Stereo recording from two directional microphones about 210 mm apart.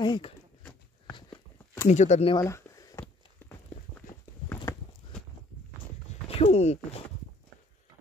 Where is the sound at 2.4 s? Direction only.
15° left (ahead or behind).